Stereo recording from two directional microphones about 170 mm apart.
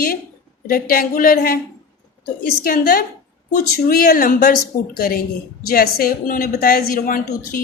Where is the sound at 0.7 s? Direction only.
60° left (ahead or behind).